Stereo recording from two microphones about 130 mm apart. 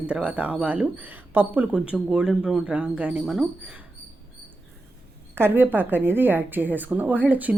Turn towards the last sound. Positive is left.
turn(degrees=-10)  # may be behind; listen again after turning